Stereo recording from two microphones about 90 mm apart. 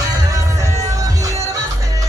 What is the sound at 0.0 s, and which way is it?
Music, 40° right (ahead or behind).